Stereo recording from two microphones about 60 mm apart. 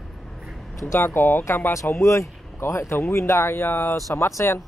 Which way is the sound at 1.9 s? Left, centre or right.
Left.